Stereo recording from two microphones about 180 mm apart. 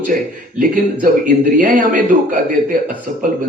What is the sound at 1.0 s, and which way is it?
A man's voice, 45° right (ahead or behind).